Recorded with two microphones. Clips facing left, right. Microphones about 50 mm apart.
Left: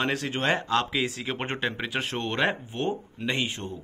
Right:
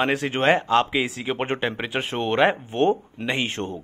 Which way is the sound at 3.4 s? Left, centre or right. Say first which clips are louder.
Right 6 dB; right.